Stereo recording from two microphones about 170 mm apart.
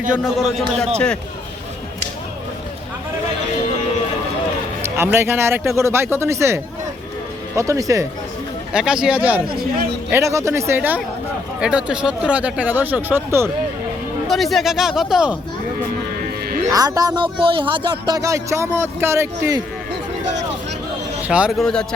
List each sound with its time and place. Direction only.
0.1 s speech: centre (ahead or behind)
4.8 s speech: 15° right (ahead or behind)
8.7 s speech: 5° right (ahead or behind)
14.3 s speech: centre (ahead or behind)
16.7 s speech: 20° right (ahead or behind)
21.2 s a man's voice: 5° right (ahead or behind)